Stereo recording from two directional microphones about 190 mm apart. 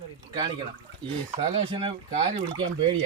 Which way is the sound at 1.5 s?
30° right (ahead or behind).